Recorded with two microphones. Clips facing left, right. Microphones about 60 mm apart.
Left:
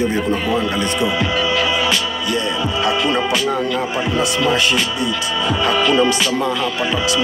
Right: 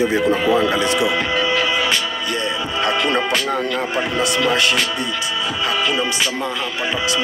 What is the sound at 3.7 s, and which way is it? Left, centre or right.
Speech, right.